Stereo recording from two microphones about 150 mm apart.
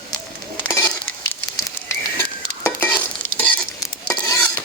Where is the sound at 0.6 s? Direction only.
15° left (ahead or behind).